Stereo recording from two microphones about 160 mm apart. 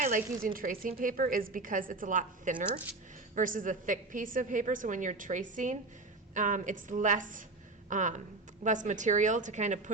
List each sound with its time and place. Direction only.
0.0 s a woman's voice: 60° right (ahead or behind)